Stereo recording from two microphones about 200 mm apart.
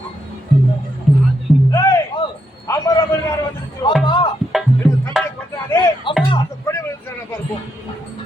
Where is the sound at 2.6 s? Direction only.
15° left (ahead or behind).